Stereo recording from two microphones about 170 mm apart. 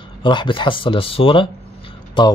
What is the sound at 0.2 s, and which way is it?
Speech, 30° left (ahead or behind).